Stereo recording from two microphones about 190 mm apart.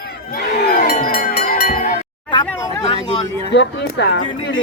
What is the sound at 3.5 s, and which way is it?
Speech, 65° left (ahead or behind).